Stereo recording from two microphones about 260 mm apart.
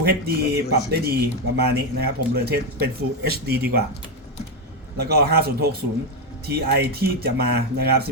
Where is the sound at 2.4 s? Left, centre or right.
Right.